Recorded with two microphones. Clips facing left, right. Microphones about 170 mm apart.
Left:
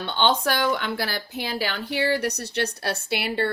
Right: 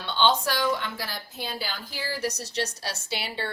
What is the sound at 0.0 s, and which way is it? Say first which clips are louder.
A woman's voice: left 2 dB; 55° left (ahead or behind).